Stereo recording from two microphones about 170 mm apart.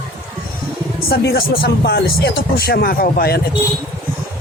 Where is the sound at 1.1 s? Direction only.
65° left (ahead or behind).